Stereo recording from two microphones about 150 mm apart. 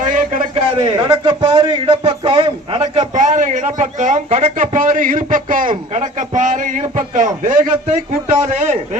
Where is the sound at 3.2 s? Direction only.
55° right (ahead or behind).